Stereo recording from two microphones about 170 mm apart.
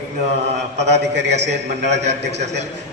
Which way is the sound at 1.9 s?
85° right.